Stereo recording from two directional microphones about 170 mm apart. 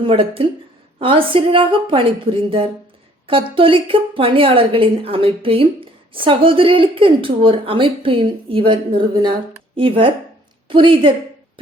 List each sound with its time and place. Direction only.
0.0 s a woman's voice: 30° right (ahead or behind)